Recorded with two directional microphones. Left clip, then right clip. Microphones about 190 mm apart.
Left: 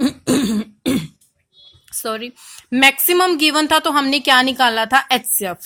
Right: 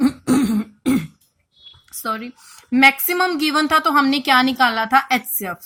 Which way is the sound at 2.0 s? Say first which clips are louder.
Left 1 dB; 40° left (ahead or behind).